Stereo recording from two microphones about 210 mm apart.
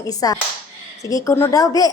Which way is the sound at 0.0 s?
15° left (ahead or behind).